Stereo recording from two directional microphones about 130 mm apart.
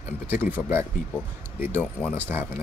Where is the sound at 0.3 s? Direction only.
15° right (ahead or behind).